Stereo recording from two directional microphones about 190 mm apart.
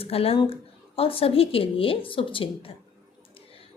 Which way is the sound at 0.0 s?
30° left (ahead or behind).